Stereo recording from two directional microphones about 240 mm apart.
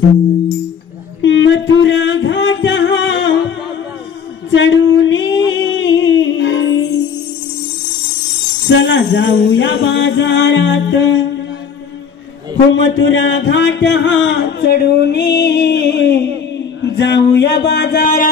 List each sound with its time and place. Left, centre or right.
1.2 s music: left
4.5 s a sound: left
8.6 s music: left
12.7 s music: left